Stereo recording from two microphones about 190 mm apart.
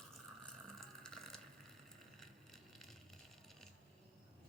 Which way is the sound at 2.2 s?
Centre (ahead or behind).